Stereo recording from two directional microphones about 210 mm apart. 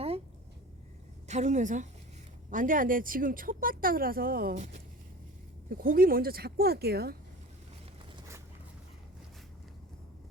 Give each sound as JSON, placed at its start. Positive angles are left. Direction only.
{"t": 1.3, "sound": "speech", "side_deg": -35}